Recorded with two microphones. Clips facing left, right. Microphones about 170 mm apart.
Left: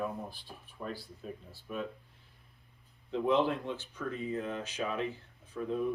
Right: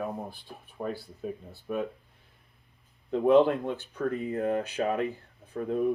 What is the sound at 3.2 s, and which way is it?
Speech, 55° right (ahead or behind).